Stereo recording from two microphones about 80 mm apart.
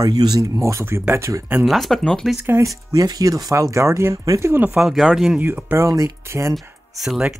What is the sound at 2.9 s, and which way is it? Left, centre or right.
Speech, right.